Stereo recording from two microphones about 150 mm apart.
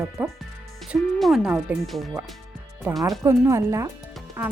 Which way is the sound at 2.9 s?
15° right (ahead or behind).